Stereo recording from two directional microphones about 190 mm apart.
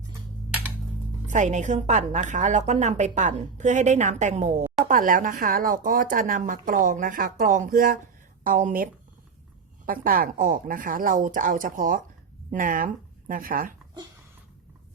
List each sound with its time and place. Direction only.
1.3 s a woman's voice: 40° right (ahead or behind)